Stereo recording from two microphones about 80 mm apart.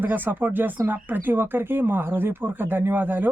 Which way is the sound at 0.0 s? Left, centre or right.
Right.